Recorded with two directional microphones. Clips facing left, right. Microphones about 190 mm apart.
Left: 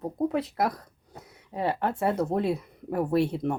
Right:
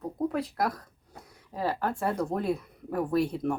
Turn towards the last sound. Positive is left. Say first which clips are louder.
# left 2 dB
turn(degrees=25)  # may be behind; listen again after turning